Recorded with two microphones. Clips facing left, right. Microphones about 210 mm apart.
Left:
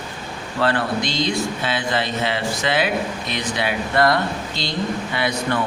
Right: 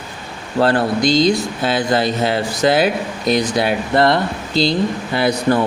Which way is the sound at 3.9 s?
25° right (ahead or behind).